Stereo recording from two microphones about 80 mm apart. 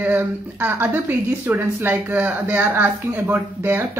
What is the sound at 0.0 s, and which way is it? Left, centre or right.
Speech, right.